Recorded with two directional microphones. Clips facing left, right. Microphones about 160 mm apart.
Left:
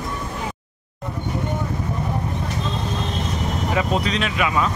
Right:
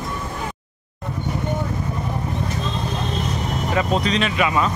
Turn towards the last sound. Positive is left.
turn(degrees=0)  # may be behind; listen again after turning